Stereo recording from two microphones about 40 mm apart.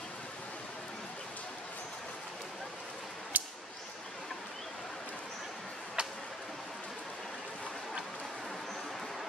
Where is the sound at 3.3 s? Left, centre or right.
Right.